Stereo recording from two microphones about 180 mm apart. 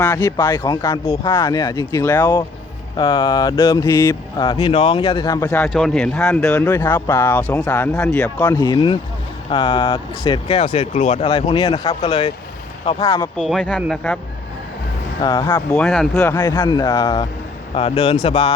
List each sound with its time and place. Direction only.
0.0 s speech: 10° left (ahead or behind)
3.0 s speech: 25° left (ahead or behind); by 8.3 s 5° left (ahead or behind)
8.4 s speech: 20° left (ahead or behind)
13.3 s speech: centre (ahead or behind)
15.2 s speech: 20° left (ahead or behind)
15.7 s speech: 5° left (ahead or behind); by 18.5 s 25° left (ahead or behind)